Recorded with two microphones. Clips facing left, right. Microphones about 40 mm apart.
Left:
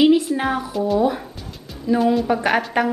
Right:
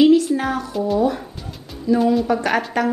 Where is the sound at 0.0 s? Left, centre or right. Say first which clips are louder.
Right 2 dB; left.